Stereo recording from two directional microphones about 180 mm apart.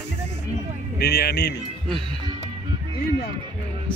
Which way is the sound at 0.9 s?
65° left (ahead or behind).